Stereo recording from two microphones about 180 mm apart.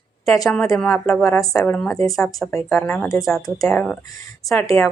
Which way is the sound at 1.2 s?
20° left (ahead or behind).